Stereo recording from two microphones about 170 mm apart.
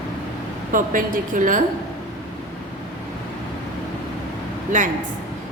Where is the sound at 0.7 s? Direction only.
55° right (ahead or behind).